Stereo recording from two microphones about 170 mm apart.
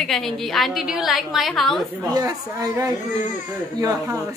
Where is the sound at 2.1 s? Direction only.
20° right (ahead or behind).